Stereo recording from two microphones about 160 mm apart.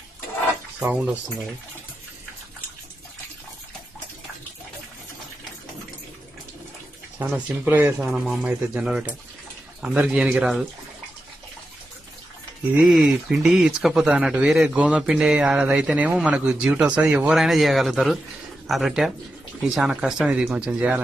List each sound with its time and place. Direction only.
0.8 s speech: 15° right (ahead or behind)
7.2 s speech: 10° right (ahead or behind)
12.7 s speech: centre (ahead or behind)